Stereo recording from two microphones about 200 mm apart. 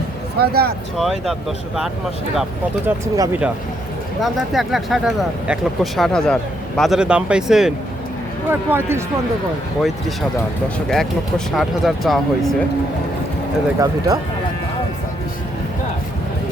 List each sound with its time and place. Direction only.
0.3 s speech: 50° right (ahead or behind)
0.9 s speech: centre (ahead or behind)
10.8 s speech: centre (ahead or behind)
13.7 s speech: 20° right (ahead or behind)